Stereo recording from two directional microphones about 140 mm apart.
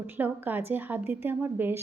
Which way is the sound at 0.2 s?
10° right (ahead or behind).